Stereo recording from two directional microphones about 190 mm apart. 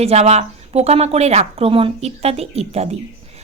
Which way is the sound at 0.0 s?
35° right (ahead or behind).